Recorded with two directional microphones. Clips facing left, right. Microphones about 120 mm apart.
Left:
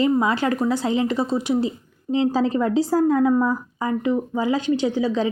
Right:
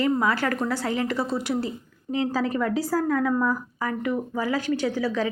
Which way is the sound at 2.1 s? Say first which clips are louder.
Left 5 dB; 25° left (ahead or behind).